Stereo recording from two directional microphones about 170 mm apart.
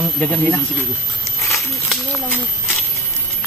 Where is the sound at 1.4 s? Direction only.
15° left (ahead or behind).